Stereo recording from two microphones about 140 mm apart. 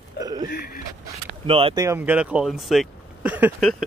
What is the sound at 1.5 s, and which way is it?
Speech, 40° right (ahead or behind).